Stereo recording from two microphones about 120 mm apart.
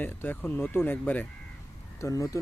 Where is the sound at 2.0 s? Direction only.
25° left (ahead or behind).